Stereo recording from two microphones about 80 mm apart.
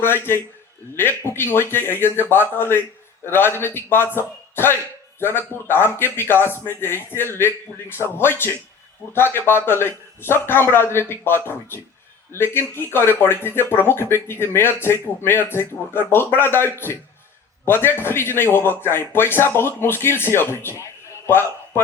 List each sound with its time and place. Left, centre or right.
0.0 s speech: left